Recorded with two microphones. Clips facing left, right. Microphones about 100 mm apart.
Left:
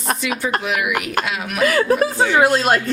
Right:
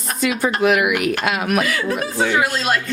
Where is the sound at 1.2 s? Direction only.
55° right (ahead or behind).